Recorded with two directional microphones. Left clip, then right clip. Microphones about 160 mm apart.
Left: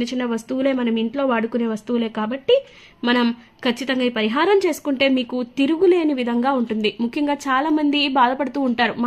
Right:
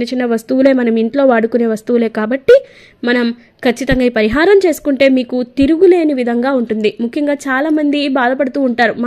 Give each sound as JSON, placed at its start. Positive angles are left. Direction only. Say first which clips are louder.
{"t": 0.0, "sound": "speech", "louder": "right 8 dB", "side_deg": -25}
{"t": 3.6, "sound": "a woman's voice", "louder": "right 8 dB", "side_deg": -30}